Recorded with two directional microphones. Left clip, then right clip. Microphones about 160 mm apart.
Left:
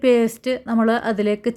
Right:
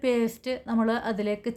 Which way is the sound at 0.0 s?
30° left (ahead or behind).